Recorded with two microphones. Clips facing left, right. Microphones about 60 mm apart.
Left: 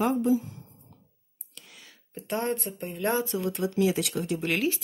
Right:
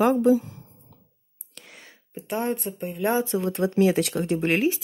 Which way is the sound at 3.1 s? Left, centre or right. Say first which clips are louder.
Right 4 dB; right.